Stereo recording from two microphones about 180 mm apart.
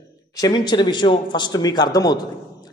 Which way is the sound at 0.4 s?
25° left (ahead or behind).